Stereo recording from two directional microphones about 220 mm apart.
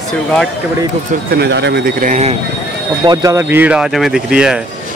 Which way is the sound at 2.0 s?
30° right (ahead or behind).